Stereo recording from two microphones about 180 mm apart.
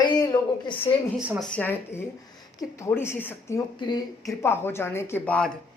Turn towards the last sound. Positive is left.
turn(degrees=5)  # may be behind; listen again after turning